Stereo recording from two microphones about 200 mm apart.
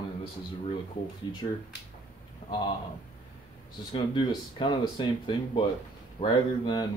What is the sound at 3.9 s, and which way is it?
Speech, 25° left (ahead or behind).